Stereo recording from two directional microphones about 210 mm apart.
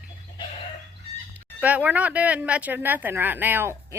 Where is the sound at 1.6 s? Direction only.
5° right (ahead or behind).